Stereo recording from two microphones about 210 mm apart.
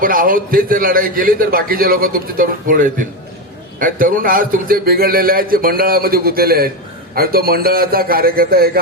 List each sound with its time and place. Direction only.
0.0 s a man's voice: 40° right (ahead or behind)